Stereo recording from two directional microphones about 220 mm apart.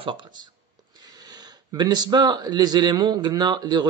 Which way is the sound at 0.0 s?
20° right (ahead or behind).